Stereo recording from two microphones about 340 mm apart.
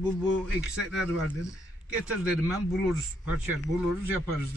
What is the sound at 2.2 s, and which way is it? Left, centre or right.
Speech, centre.